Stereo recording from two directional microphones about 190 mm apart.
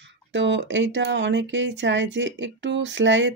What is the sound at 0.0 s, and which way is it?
Speech, 75° right (ahead or behind).